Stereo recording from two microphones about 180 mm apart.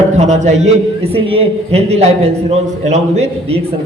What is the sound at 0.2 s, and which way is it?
A man's voice, 40° right (ahead or behind).